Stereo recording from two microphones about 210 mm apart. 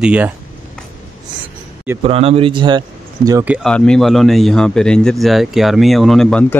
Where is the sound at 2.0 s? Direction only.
30° right (ahead or behind); by 3.7 s 5° right (ahead or behind).